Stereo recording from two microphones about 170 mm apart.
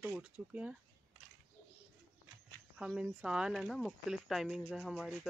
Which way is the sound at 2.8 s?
5° right (ahead or behind).